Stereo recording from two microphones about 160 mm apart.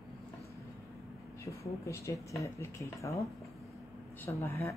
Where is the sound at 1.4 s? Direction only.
20° left (ahead or behind).